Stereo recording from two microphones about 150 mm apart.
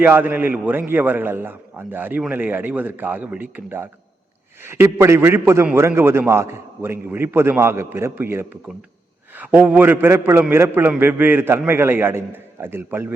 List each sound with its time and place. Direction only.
0.0 s a man's voice: 15° right (ahead or behind)